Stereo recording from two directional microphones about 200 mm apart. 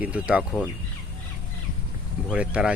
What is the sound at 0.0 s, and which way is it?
Speech, 5° right (ahead or behind).